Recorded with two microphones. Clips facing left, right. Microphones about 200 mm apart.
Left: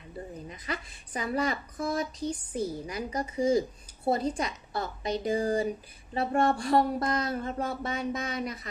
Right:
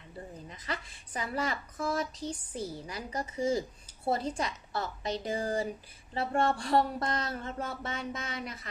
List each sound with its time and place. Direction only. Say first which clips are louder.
0.5 s a woman's voice: left 2 dB; 15° left (ahead or behind)